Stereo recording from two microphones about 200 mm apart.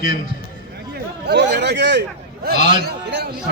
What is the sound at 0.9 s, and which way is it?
A man's voice, 55° right (ahead or behind).